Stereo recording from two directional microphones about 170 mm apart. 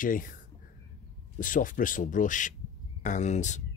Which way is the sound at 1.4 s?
50° left (ahead or behind).